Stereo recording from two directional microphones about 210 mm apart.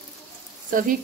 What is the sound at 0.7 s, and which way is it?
Speech, 40° right (ahead or behind).